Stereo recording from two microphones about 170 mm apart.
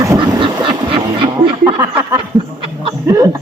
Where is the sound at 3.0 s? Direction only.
20° right (ahead or behind).